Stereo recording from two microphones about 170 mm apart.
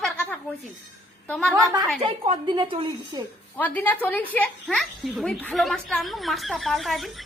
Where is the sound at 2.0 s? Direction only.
30° right (ahead or behind).